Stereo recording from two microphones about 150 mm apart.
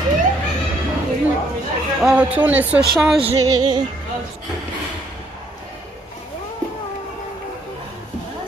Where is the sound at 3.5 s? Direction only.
30° right (ahead or behind).